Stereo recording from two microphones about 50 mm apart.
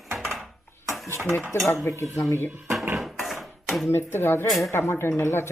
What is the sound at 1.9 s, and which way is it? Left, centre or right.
Speech, right.